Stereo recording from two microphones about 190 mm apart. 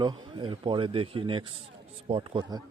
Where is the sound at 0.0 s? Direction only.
25° right (ahead or behind).